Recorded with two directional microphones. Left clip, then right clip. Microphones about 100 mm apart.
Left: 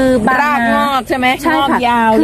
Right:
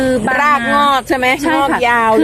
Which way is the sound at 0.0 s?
55° left (ahead or behind).